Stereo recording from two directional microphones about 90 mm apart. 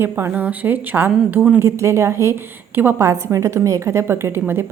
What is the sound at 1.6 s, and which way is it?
A woman's voice, 30° right (ahead or behind).